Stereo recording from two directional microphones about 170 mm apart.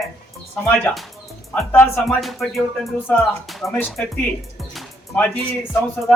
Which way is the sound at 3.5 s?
Centre (ahead or behind).